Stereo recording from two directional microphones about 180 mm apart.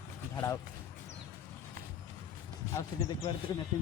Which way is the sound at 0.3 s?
20° left (ahead or behind).